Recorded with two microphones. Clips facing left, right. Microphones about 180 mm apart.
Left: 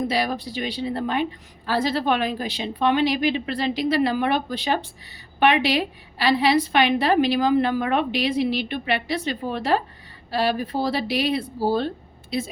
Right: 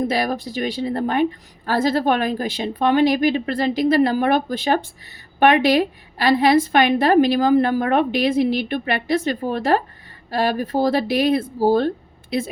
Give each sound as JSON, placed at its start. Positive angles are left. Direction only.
{"t": 0.1, "sound": "a woman's voice", "side_deg": -50}